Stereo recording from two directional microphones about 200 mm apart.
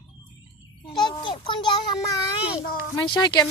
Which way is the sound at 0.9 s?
20° left (ahead or behind).